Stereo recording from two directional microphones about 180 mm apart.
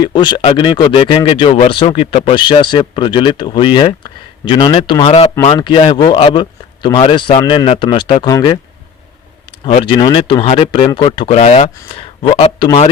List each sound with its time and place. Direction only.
0.0 s speech: 25° left (ahead or behind)
9.6 s speech: 30° left (ahead or behind)